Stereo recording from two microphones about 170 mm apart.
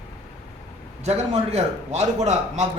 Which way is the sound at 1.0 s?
40° right (ahead or behind).